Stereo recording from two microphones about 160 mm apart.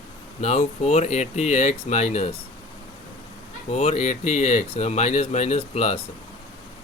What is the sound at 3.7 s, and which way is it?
Speech, 40° left (ahead or behind).